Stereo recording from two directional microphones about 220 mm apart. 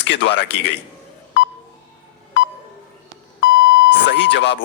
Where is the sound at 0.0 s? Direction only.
50° left (ahead or behind).